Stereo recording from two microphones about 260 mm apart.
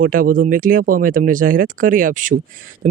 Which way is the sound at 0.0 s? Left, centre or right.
Right.